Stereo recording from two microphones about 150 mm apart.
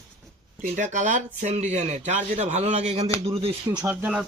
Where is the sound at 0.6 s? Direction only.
55° right (ahead or behind); by 3.5 s 40° right (ahead or behind).